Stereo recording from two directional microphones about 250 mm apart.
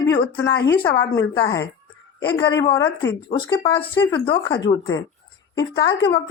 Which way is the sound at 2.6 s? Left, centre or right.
Centre.